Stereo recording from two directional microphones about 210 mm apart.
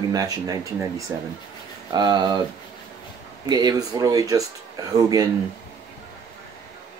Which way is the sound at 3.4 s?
20° right (ahead or behind).